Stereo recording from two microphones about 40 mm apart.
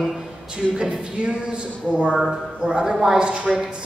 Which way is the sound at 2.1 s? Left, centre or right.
Centre.